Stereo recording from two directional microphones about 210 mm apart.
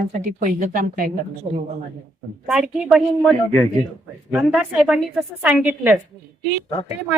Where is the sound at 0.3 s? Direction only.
35° right (ahead or behind).